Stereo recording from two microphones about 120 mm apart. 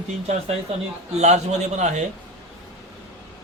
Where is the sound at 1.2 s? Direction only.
70° right (ahead or behind).